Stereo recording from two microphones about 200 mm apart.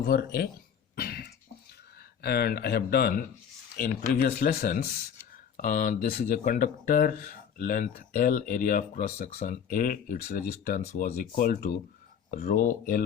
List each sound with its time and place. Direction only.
0.0 s speech: 50° left (ahead or behind)
0.9 s cough: 50° left (ahead or behind)
2.2 s speech: 50° left (ahead or behind)